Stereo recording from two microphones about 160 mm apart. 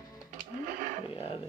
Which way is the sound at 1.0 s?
35° left (ahead or behind).